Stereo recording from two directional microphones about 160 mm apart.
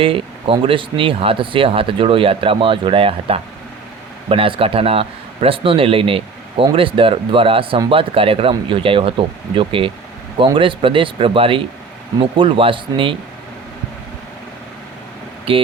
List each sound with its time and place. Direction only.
0.0 s speech: 35° right (ahead or behind)
15.5 s speech: 35° right (ahead or behind)